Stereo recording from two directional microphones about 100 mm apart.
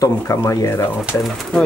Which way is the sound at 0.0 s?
30° left (ahead or behind).